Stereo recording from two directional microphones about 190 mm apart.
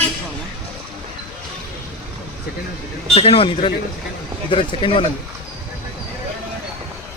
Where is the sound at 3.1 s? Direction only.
30° left (ahead or behind).